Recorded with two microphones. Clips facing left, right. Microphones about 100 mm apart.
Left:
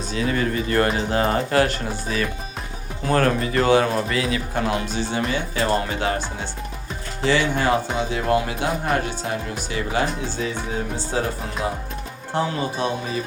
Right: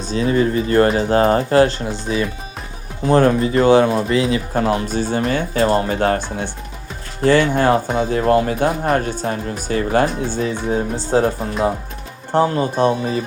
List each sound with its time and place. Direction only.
0.1 s speech: 30° right (ahead or behind)
4.5 s speech: 40° right (ahead or behind)
12.3 s speech: 50° right (ahead or behind)